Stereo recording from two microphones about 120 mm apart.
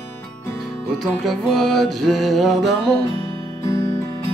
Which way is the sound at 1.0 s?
Centre (ahead or behind).